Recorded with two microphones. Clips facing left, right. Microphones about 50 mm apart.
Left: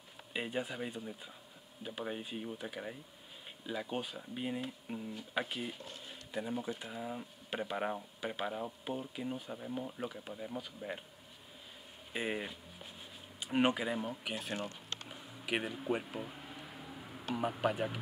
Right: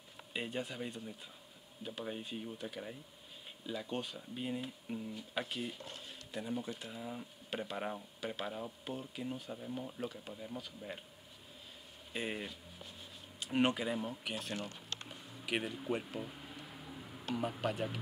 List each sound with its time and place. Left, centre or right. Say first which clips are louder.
0.3 s speech: left 2 dB; centre
12.1 s music: left 3 dB; centre
13.4 s speech: left 1 dB; centre
14.5 s speech: left 2 dB; left
15.0 s a sound: left 2 dB; centre